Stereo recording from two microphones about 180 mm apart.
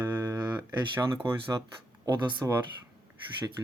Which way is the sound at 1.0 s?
20° right (ahead or behind).